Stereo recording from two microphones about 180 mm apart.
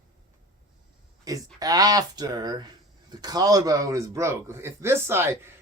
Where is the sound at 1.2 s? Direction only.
20° right (ahead or behind).